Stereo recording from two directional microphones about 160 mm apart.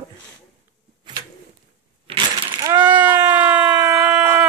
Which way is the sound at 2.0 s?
30° right (ahead or behind).